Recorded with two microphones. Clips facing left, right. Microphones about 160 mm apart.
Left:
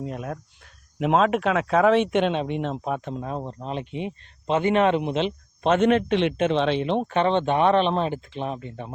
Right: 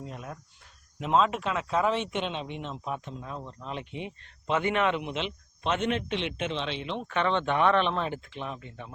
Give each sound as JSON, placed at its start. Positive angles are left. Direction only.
{"t": 0.0, "sound": "speech", "side_deg": 60}
{"t": 3.6, "sound": "speech", "side_deg": 30}
{"t": 7.1, "sound": "speech", "side_deg": 30}